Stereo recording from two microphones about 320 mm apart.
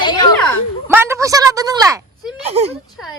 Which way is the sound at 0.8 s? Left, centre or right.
Centre.